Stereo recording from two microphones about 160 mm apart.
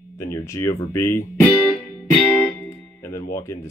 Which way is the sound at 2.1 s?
10° left (ahead or behind).